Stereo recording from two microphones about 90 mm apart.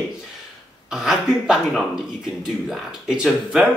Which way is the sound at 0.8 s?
5° right (ahead or behind).